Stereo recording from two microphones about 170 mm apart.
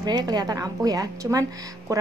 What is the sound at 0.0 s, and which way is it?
A woman's voice, 25° right (ahead or behind).